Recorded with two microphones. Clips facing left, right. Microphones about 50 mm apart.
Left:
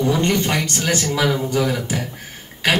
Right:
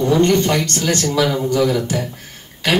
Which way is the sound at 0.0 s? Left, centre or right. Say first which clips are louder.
Right 4 dB; centre.